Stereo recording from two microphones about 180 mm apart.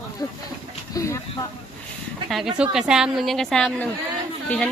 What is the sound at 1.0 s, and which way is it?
Speech, 15° left (ahead or behind).